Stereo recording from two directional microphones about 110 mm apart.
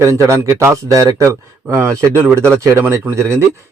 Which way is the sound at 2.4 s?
10° left (ahead or behind).